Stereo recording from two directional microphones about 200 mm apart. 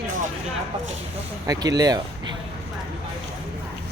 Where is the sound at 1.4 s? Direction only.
20° right (ahead or behind).